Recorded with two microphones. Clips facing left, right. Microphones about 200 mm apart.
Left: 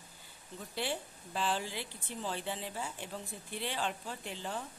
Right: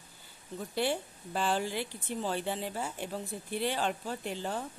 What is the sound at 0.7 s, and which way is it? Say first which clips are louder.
Speech: right 6 dB; 50° right (ahead or behind).